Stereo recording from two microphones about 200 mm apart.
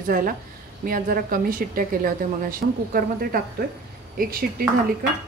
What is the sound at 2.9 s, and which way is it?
Speech, 45° right (ahead or behind).